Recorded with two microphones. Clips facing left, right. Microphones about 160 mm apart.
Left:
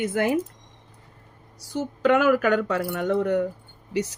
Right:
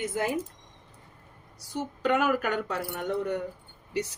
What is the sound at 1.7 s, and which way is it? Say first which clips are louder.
Speech: left 6 dB; 90° left.